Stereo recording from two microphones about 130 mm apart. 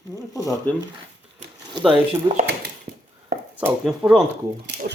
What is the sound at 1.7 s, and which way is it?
Speech, 40° right (ahead or behind).